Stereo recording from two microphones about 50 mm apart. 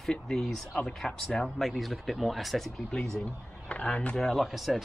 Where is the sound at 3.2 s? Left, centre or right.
Left.